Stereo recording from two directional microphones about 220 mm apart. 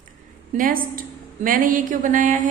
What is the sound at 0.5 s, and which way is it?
A woman's voice, 40° right (ahead or behind).